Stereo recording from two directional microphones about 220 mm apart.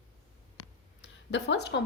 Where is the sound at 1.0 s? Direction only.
55° left (ahead or behind).